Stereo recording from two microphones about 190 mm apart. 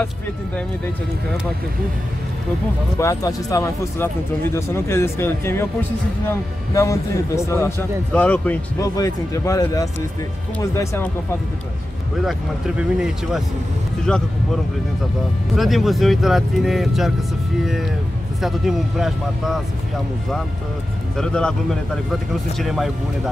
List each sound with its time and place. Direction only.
3.0 s a man's voice: 15° left (ahead or behind)
8.8 s a man's voice: 20° left (ahead or behind)
12.3 s speech: centre (ahead or behind)
15.5 s speech: centre (ahead or behind)
18.4 s speech: centre (ahead or behind)
21.2 s speech: 5° left (ahead or behind)